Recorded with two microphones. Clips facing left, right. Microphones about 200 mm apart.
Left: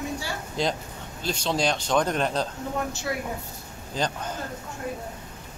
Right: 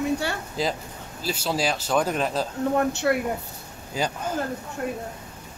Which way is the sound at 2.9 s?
60° right (ahead or behind).